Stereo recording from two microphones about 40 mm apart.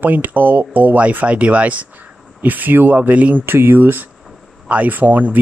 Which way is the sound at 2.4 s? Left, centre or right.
Right.